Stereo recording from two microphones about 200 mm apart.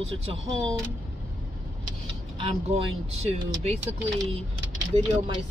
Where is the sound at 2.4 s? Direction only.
30° right (ahead or behind).